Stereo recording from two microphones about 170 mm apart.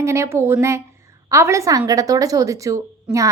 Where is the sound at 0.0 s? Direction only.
15° right (ahead or behind).